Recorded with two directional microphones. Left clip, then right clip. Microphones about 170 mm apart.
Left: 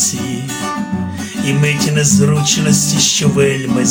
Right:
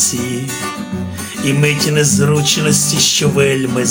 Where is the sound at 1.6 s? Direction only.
25° right (ahead or behind).